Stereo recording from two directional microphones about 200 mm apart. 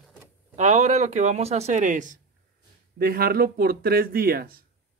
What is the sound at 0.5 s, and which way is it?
Speech, 35° right (ahead or behind).